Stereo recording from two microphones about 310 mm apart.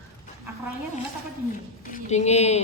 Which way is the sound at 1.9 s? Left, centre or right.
Left.